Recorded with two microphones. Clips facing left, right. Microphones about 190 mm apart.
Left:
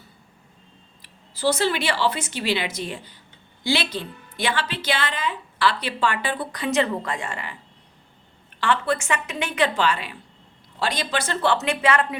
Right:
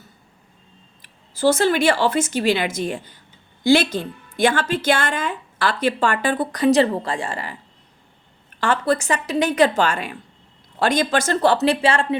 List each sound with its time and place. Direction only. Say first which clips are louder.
1.0 s a woman's voice: right 5 dB; 50° right (ahead or behind)
8.6 s a woman's voice: right 3 dB; 40° right (ahead or behind)